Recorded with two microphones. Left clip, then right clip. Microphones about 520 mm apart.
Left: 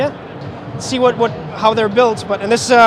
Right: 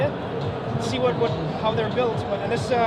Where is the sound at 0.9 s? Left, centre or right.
Left.